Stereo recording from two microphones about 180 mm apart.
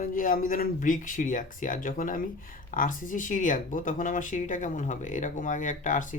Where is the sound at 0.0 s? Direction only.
50° left (ahead or behind).